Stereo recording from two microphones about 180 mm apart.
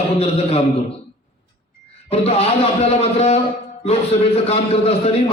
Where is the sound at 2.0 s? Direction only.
35° left (ahead or behind).